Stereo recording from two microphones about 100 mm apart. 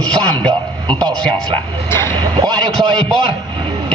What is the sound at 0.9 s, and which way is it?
Speech, 40° right (ahead or behind).